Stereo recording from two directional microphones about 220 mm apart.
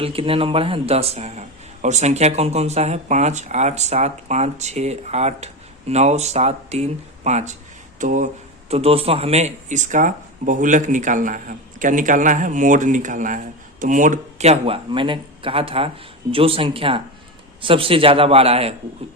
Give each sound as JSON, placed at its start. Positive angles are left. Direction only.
{"t": 0.0, "sound": "speech", "side_deg": -25}